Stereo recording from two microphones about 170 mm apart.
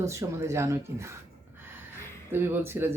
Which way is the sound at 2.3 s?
15° right (ahead or behind).